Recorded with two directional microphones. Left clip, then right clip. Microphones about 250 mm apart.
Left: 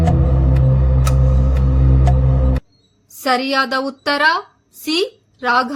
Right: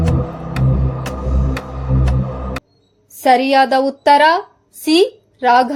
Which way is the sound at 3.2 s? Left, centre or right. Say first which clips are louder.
Right 5 dB; centre.